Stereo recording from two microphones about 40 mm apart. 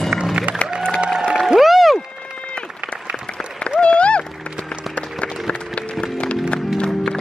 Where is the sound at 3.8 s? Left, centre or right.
Left.